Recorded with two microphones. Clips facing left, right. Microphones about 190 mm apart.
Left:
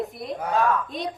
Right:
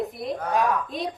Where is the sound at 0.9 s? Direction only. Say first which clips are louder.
Right 1 dB; centre (ahead or behind).